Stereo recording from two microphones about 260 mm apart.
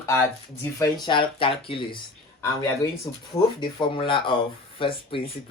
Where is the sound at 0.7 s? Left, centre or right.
Centre.